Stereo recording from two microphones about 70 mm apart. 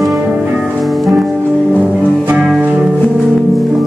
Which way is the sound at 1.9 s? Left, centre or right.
Centre.